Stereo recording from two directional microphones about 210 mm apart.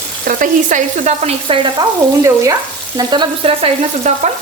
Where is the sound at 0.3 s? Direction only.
35° right (ahead or behind).